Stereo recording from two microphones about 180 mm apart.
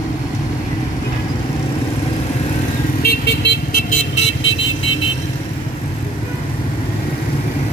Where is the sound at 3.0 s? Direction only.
65° left (ahead or behind).